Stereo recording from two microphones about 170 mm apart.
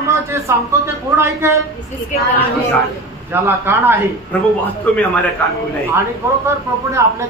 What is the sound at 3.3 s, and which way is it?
Speech, 15° right (ahead or behind).